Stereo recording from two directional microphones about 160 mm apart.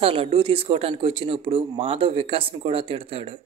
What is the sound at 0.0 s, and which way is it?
Speech, 35° right (ahead or behind).